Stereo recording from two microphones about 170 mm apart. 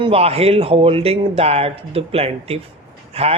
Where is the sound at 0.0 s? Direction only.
35° right (ahead or behind).